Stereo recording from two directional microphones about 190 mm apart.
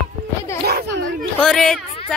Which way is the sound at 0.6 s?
55° right (ahead or behind).